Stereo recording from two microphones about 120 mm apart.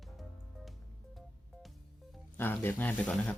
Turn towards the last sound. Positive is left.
turn(degrees=10)  # may be behind; listen again after turning